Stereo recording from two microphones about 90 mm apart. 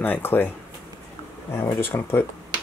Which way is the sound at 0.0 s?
25° left (ahead or behind).